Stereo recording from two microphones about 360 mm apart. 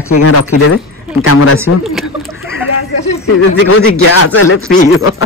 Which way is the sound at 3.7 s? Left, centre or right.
Left.